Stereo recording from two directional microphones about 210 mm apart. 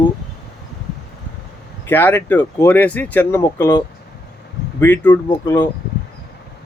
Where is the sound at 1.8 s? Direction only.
10° left (ahead or behind).